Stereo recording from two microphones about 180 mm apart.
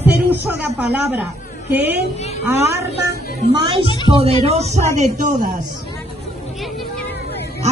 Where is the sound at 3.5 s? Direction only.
25° right (ahead or behind); by 5.5 s 40° right (ahead or behind).